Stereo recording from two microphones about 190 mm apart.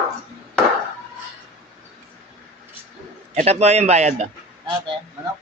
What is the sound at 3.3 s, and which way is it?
Speech, 35° right (ahead or behind).